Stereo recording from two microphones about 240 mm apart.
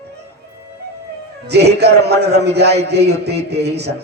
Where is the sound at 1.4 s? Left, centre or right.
Right.